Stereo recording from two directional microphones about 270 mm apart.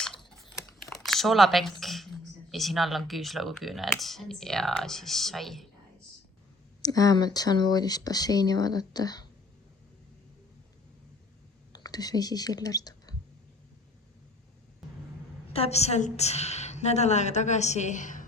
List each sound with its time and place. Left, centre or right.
0.8 s a sound: centre
2.5 s speech: centre
6.8 s speech: centre
11.7 s speech: centre
15.5 s a woman's voice: left